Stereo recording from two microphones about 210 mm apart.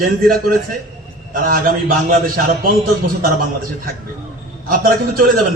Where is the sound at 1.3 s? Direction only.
40° right (ahead or behind).